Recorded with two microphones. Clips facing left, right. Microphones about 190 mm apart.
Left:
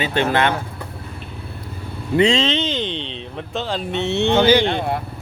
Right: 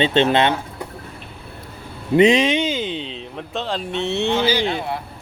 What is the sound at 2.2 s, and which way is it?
Speech, 15° right (ahead or behind).